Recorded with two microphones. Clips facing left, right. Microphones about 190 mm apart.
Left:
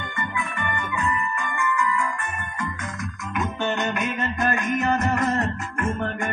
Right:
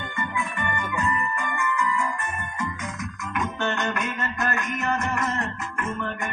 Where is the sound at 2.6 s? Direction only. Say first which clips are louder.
Even; 5° right (ahead or behind).